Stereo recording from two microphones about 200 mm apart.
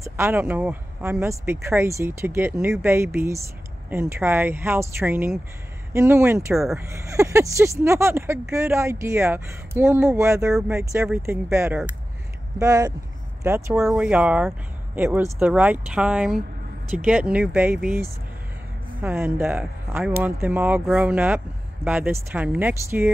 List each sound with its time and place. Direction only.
0.0 s speech: 10° right (ahead or behind)
6.5 s speech: centre (ahead or behind)
6.9 s speech: 15° right (ahead or behind)
11.1 s speech: 5° right (ahead or behind)